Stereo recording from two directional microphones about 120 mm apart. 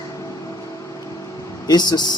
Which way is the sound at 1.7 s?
35° left (ahead or behind).